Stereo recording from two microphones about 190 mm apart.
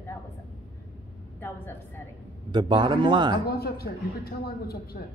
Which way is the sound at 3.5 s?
55° left (ahead or behind).